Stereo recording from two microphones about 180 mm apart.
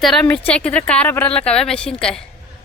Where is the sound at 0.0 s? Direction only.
Centre (ahead or behind).